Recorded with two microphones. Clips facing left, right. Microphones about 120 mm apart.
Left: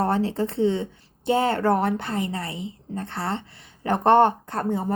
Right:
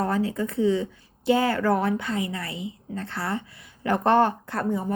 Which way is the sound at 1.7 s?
55° left (ahead or behind).